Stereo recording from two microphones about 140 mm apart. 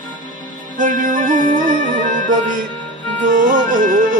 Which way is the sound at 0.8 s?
70° right (ahead or behind).